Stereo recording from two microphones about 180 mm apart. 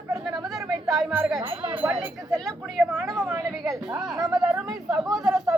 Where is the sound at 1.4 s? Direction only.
30° right (ahead or behind).